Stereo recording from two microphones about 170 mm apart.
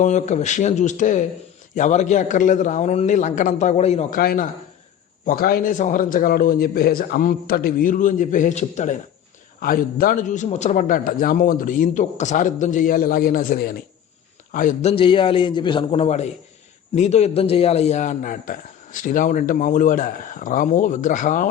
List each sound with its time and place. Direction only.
0.0 s a man's voice: 45° left (ahead or behind)
4.2 s a man's voice: 60° left (ahead or behind); by 9.0 s 45° left (ahead or behind)
9.6 s a man's voice: 60° left (ahead or behind)